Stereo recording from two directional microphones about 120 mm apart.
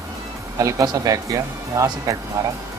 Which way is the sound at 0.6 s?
30° right (ahead or behind).